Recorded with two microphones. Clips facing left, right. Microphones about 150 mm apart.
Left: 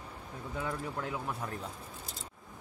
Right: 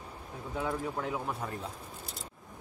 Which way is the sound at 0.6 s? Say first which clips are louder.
Right 3 dB; 5° right (ahead or behind).